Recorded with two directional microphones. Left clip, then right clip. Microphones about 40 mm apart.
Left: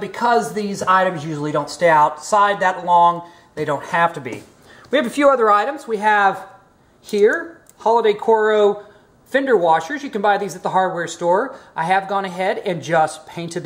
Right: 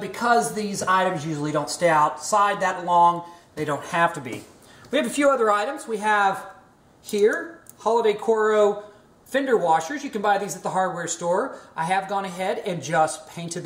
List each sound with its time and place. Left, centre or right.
0.0 s a woman's voice: left
7.8 s a woman's voice: left